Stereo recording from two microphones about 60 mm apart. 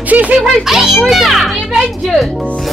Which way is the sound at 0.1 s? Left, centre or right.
Right.